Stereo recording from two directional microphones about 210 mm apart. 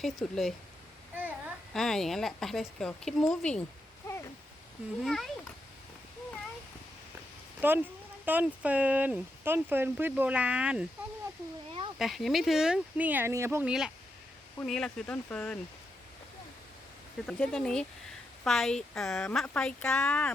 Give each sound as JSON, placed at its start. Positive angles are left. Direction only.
{"t": 0.0, "sound": "a child's voice", "side_deg": 0}
{"t": 4.1, "sound": "a sound", "side_deg": 15}
{"t": 5.0, "sound": "speech", "side_deg": 0}
{"t": 7.6, "sound": "speech", "side_deg": -10}
{"t": 11.9, "sound": "speech", "side_deg": 0}
{"t": 17.2, "sound": "speech", "side_deg": 5}